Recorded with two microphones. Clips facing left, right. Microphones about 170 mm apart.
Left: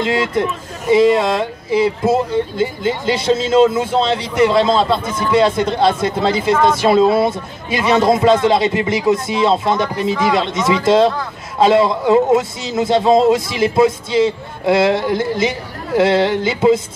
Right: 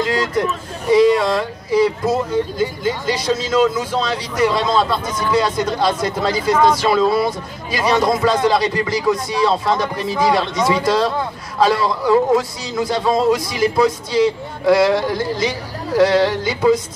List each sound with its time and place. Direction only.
0.0 s speech: 25° left (ahead or behind)